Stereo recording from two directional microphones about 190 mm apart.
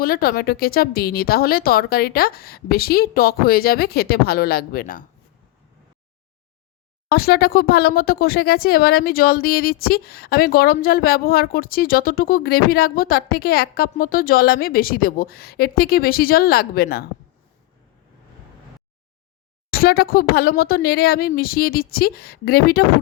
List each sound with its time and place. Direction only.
0.0 s speech: 50° left (ahead or behind)
7.1 s speech: 55° left (ahead or behind)
19.7 s speech: 50° left (ahead or behind)